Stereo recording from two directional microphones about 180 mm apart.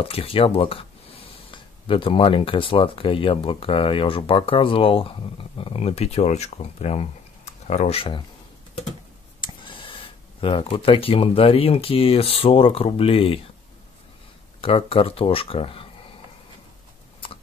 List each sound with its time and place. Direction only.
0.0 s speech: 30° left (ahead or behind)
9.4 s speech: 30° left (ahead or behind)
14.6 s speech: 30° left (ahead or behind)